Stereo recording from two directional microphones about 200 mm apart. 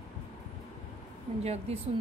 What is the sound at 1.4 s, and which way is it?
Speech, 30° right (ahead or behind).